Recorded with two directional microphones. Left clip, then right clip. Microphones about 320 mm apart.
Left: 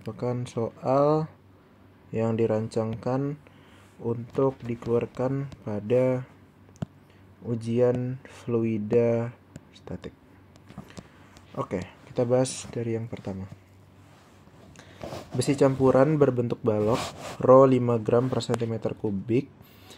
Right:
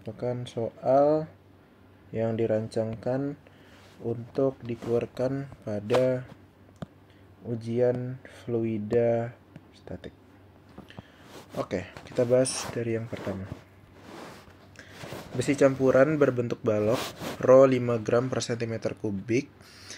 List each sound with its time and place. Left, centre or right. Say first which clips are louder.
0.0 s speech: left 1 dB; centre
7.4 s speech: left 2 dB; centre
11.5 s speech: even; centre
15.3 s speech: even; centre